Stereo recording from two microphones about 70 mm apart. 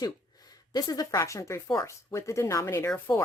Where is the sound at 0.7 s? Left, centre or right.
Left.